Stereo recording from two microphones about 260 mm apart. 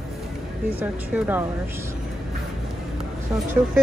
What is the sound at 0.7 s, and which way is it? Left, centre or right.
Speech, centre.